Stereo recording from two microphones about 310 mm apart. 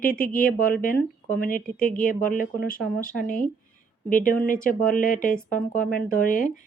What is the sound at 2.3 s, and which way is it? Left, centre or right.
Speech, left.